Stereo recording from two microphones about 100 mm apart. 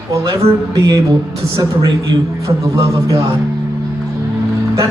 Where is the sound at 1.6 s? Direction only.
45° right (ahead or behind).